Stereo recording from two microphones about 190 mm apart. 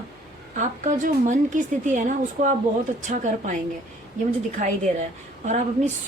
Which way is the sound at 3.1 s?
40° right (ahead or behind).